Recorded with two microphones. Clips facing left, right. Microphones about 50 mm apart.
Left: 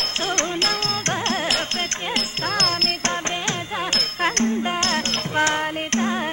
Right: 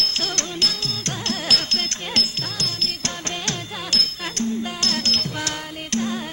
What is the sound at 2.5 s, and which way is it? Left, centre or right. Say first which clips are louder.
Music: left 7 dB; left.